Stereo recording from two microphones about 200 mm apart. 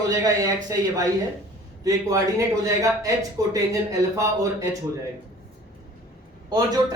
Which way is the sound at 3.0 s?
15° right (ahead or behind).